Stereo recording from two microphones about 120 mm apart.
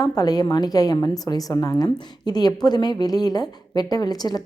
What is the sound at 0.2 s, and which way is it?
A woman's voice, 35° left (ahead or behind).